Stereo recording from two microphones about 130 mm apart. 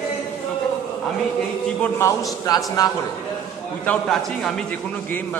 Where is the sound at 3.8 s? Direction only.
5° left (ahead or behind).